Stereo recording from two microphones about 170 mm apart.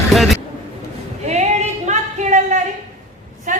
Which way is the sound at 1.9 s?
45° right (ahead or behind).